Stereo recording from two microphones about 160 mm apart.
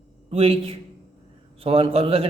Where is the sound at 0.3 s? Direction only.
35° right (ahead or behind).